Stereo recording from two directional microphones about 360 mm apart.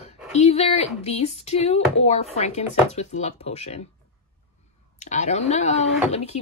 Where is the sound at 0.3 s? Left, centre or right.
Centre.